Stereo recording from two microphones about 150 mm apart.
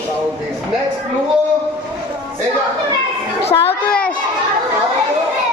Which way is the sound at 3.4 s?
45° left (ahead or behind).